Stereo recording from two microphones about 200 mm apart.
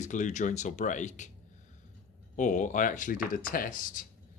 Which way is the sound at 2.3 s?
40° left (ahead or behind).